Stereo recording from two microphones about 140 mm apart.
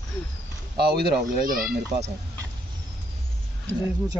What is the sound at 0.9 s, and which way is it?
Speech, 90° right.